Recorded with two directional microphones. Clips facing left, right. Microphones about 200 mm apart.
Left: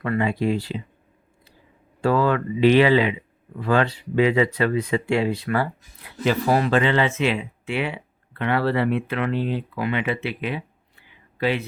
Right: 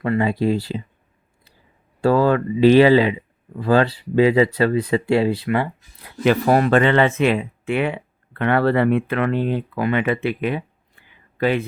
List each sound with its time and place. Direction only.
0.0 s speech: 30° right (ahead or behind)
2.0 s speech: 40° right (ahead or behind)
6.2 s speech: 55° right (ahead or behind)